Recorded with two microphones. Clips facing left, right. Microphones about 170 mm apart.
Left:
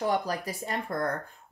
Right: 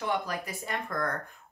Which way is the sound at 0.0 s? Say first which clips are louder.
Left 3 dB; 40° left (ahead or behind).